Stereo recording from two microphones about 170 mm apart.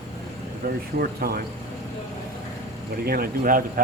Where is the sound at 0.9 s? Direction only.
65° right (ahead or behind).